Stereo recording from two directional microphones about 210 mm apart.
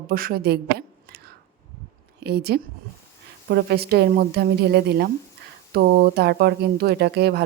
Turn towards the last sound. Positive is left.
turn(degrees=-50)  # may be behind; listen again after turning